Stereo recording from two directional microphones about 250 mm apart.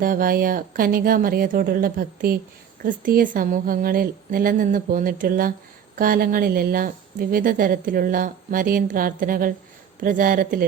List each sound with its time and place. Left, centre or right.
0.0 s a woman's voice: right